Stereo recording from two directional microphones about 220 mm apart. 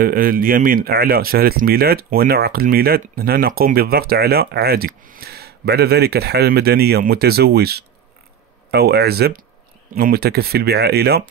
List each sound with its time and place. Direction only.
0.0 s speech: 40° right (ahead or behind)